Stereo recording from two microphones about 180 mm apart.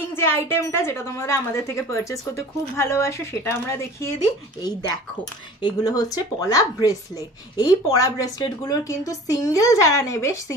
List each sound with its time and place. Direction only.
0.1 s a woman's voice: 15° left (ahead or behind)